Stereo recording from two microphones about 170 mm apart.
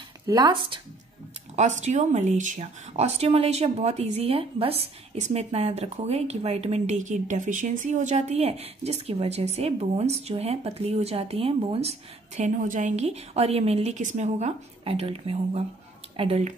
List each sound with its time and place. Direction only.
0.3 s speech: 25° right (ahead or behind)
1.6 s speech: 45° right (ahead or behind)